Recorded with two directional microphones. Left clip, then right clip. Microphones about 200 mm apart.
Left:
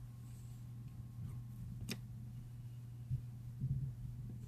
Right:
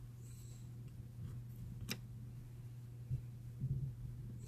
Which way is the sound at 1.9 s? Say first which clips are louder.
Right 2 dB; centre (ahead or behind).